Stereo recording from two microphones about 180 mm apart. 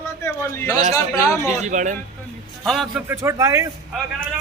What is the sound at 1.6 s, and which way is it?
Speech, 45° right (ahead or behind).